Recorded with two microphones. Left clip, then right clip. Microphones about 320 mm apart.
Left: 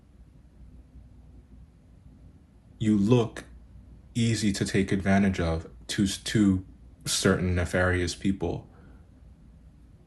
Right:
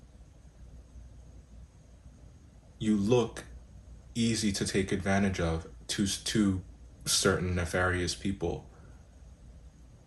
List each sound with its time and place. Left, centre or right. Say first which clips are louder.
2.7 s speech: left 3 dB; left